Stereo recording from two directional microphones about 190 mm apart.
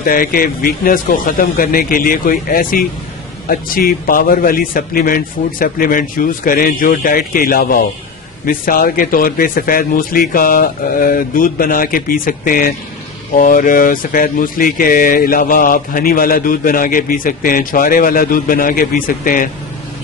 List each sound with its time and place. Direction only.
0.0 s speech: 50° left (ahead or behind)